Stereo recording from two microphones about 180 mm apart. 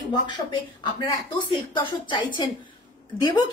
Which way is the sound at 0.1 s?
25° left (ahead or behind).